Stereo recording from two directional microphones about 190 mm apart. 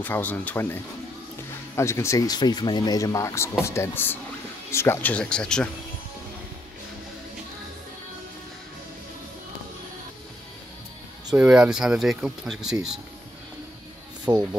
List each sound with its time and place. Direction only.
0.0 s speech: 10° left (ahead or behind)
1.8 s speech: 15° left (ahead or behind)
11.3 s speech: 5° right (ahead or behind)
14.2 s speech: 20° right (ahead or behind)